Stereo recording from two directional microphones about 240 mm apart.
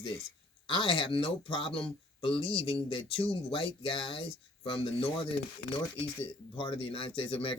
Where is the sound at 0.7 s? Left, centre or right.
Left.